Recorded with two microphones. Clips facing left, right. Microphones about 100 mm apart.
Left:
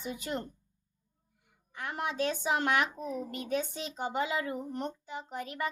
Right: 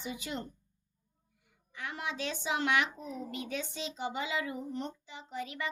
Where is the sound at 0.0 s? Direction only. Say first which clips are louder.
Left 3 dB; 45° left (ahead or behind).